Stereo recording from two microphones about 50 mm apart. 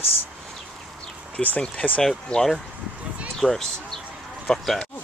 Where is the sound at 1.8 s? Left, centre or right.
Left.